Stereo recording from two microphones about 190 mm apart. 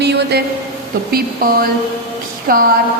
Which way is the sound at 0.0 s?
60° right (ahead or behind).